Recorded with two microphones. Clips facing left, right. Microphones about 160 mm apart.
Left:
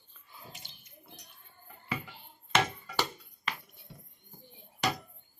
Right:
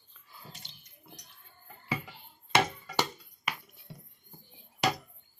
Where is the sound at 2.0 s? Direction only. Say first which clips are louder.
Even; 10° right (ahead or behind).